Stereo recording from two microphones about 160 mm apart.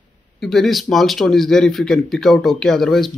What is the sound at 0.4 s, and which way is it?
Speech, centre (ahead or behind).